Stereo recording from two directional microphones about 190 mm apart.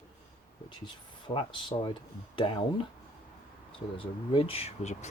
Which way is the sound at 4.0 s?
30° left (ahead or behind).